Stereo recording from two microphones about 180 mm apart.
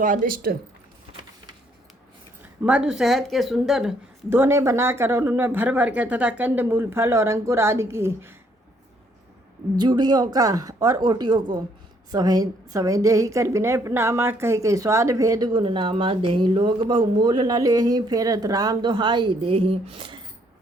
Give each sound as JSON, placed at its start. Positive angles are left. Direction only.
{"t": 0.0, "sound": "speech", "side_deg": -45}
{"t": 1.1, "sound": "vehicle", "side_deg": -30}
{"t": 2.6, "sound": "speech", "side_deg": -5}
{"t": 4.3, "sound": "speech", "side_deg": -15}
{"t": 9.7, "sound": "a woman's voice", "side_deg": -25}